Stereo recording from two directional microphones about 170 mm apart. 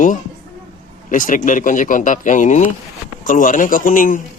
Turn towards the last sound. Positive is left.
turn(degrees=50)  # may be behind; listen again after turning